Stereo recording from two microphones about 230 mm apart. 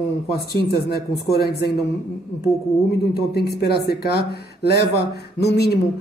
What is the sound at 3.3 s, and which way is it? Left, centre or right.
Speech, left.